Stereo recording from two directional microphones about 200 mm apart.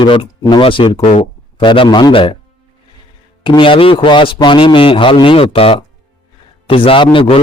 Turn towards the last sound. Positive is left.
turn(degrees=25)  # may be behind; listen again after turning